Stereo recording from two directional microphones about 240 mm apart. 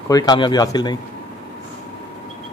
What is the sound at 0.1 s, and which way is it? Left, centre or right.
Speech, centre.